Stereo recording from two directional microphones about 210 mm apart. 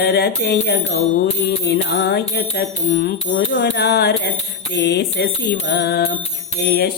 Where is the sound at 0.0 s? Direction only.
50° left (ahead or behind).